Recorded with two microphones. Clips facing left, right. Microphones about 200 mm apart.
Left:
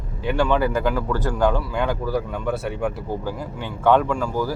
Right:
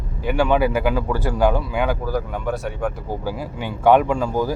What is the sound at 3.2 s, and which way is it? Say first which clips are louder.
Speech: right 2 dB; 10° right (ahead or behind).